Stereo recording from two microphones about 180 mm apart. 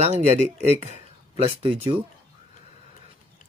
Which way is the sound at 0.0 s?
40° right (ahead or behind).